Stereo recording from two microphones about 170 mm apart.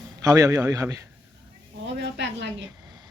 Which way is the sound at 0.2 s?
20° right (ahead or behind).